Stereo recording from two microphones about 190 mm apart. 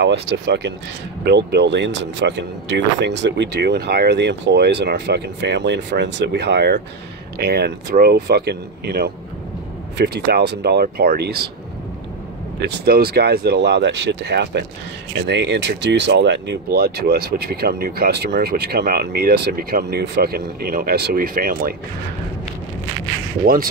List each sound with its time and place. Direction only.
0.0 s speech: 60° right (ahead or behind)
12.5 s speech: 60° right (ahead or behind)
23.4 s speech: 50° right (ahead or behind)